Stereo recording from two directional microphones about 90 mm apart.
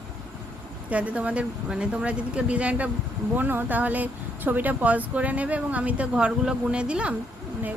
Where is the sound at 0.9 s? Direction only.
15° right (ahead or behind).